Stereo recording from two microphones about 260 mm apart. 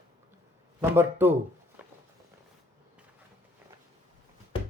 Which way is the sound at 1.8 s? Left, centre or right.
Centre.